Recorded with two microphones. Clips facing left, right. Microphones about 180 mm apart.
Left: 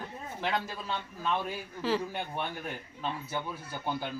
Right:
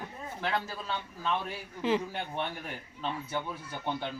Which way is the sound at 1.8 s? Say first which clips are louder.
Right 2 dB; 20° right (ahead or behind).